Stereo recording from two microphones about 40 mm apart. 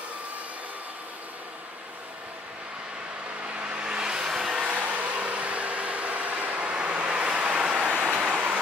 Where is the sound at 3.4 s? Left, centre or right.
Right.